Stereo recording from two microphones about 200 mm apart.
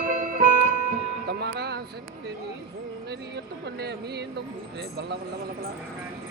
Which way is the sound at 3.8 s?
55° right (ahead or behind).